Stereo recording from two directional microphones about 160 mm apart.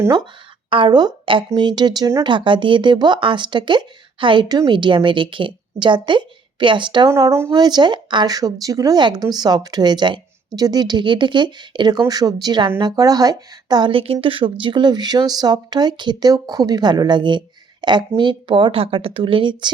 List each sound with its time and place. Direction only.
0.0 s a woman's voice: 25° right (ahead or behind)